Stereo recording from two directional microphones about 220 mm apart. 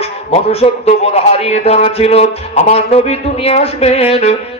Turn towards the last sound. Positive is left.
turn(degrees=30)  # may be behind; listen again after turning